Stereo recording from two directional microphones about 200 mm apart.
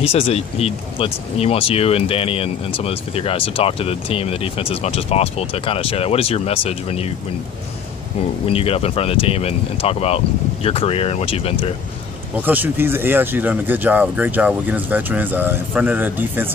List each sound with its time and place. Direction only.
0.0 s speech: 30° left (ahead or behind)
8.5 s speech: 30° left (ahead or behind)
12.4 s speech: 10° right (ahead or behind)